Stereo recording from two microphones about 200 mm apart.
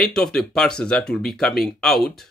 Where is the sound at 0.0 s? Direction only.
5° left (ahead or behind).